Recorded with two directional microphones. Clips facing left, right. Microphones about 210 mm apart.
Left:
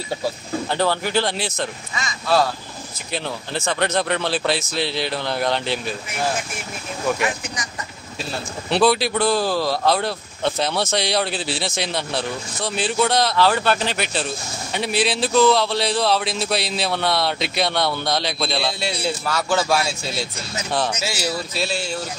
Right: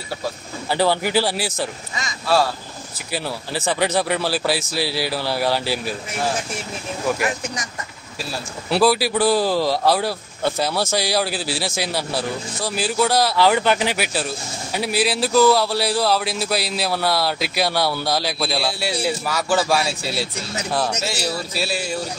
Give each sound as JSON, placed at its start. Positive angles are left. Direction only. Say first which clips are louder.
{"t": 0.7, "sound": "speech", "louder": "right 3 dB", "side_deg": -10}
{"t": 3.1, "sound": "speech", "louder": "right 1 dB", "side_deg": -10}
{"t": 8.6, "sound": "speech", "louder": "even", "side_deg": -5}
{"t": 21.6, "sound": "speech", "louder": "even", "side_deg": -10}